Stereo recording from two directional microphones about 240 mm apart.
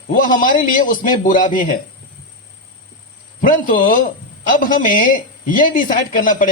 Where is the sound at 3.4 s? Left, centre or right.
Left.